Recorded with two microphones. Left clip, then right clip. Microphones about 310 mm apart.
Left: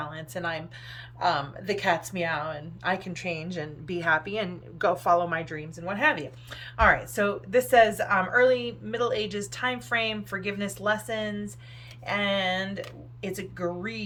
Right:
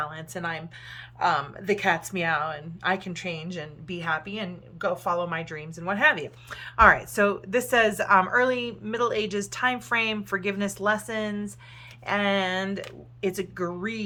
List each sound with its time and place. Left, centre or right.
0.0 s a woman's voice: centre